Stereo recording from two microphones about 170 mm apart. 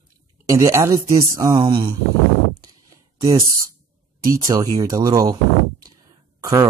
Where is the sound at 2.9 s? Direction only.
20° right (ahead or behind).